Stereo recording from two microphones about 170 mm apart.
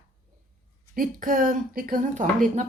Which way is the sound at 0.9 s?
55° right (ahead or behind).